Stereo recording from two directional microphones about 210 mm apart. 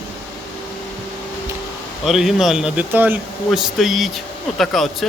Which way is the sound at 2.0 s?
Centre (ahead or behind).